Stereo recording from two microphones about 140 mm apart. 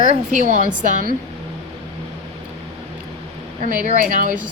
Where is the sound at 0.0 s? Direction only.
65° right (ahead or behind).